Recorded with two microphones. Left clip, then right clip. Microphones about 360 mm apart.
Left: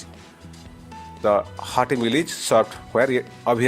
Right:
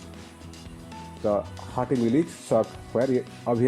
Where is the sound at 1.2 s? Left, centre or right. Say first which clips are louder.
Left 6 dB; left.